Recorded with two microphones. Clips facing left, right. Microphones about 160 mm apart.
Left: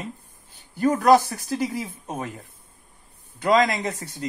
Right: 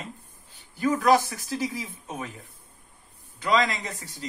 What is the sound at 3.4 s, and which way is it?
Speech, 45° left (ahead or behind).